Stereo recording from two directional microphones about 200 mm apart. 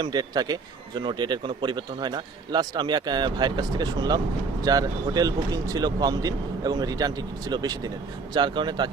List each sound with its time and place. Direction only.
0.0 s speech: 20° right (ahead or behind)